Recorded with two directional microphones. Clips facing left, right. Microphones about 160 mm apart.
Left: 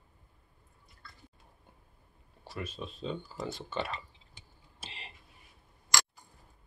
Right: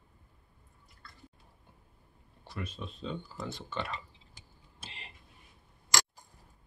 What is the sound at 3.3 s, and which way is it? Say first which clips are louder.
Speech: left 2 dB; 30° left (ahead or behind).